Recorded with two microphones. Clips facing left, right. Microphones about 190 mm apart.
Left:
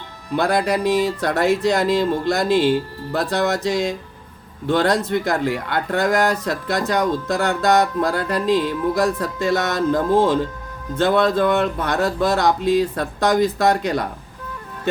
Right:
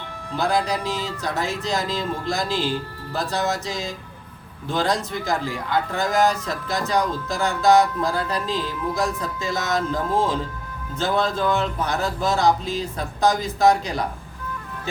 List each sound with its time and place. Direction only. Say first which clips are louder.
0.3 s speech: left 4 dB; 65° left (ahead or behind)